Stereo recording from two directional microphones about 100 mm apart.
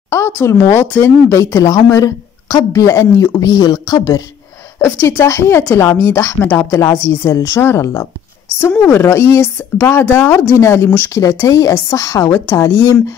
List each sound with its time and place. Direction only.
0.1 s speech: 25° left (ahead or behind)
4.8 s speech: 25° left (ahead or behind)